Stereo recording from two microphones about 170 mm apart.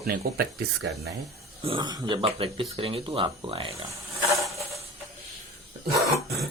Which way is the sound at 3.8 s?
20° right (ahead or behind).